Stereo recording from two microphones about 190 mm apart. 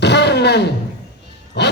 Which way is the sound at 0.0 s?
65° left (ahead or behind).